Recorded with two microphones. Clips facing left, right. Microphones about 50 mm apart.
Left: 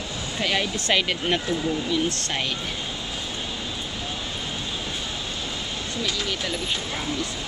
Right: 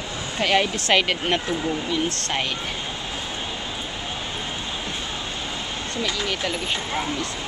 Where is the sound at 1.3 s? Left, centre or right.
Right.